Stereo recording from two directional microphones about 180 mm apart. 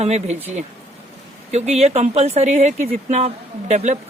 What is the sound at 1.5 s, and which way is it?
Speech, 35° right (ahead or behind).